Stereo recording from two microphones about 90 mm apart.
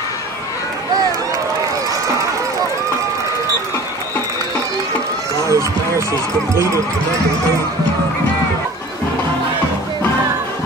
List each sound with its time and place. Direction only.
5.5 s run: 35° right (ahead or behind)